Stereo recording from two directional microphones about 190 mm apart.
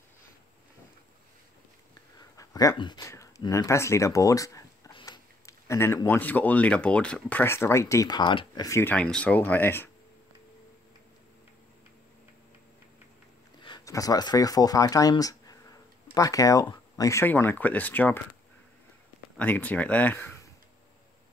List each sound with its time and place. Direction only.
2.1 s speech: 20° left (ahead or behind)
13.6 s speech: 25° left (ahead or behind)
19.3 s speech: 10° left (ahead or behind)